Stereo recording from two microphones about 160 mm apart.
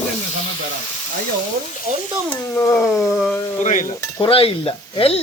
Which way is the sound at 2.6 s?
15° left (ahead or behind).